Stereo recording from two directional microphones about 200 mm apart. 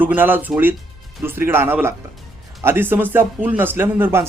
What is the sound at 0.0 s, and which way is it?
Speech, 10° right (ahead or behind).